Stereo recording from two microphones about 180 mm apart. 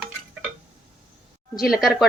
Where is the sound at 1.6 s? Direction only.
Centre (ahead or behind).